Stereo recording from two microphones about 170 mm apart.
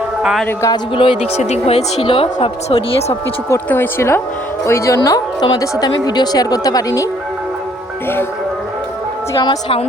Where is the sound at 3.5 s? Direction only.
10° left (ahead or behind).